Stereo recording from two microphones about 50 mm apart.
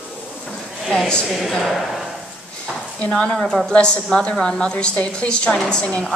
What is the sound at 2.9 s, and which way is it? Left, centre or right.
Speech, left.